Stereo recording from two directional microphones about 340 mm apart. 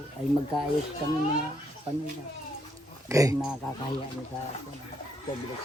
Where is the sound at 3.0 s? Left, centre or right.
Centre.